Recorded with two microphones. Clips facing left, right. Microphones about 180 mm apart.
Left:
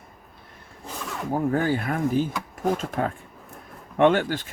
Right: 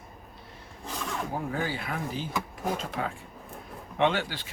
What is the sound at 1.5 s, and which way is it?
Speech, 50° left (ahead or behind).